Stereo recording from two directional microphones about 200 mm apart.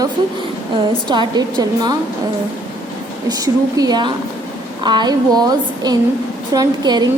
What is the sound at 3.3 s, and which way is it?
A woman's voice, 20° right (ahead or behind).